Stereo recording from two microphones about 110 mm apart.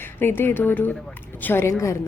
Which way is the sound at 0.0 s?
20° left (ahead or behind).